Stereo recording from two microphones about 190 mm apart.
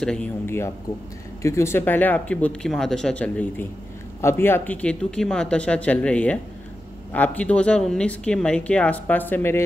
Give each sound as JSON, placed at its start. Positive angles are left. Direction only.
{"t": 0.0, "sound": "speech", "side_deg": 5}